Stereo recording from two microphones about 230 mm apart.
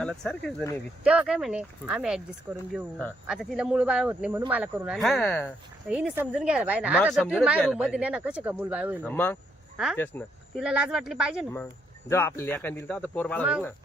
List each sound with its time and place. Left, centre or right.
0.0 s speech: centre
9.0 s speech: centre
10.6 s speech: centre
11.5 s speech: centre